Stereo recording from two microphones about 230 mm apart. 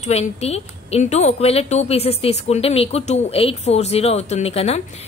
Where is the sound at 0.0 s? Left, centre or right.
Left.